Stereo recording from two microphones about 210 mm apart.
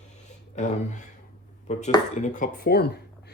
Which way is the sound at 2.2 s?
35° left (ahead or behind).